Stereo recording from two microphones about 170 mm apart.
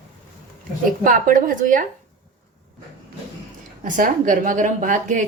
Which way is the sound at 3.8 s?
50° right (ahead or behind).